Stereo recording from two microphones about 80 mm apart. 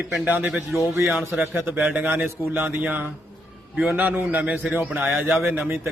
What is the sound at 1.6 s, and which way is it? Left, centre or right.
A man's voice, right.